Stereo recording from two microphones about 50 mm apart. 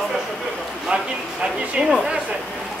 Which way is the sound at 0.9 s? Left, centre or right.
Right.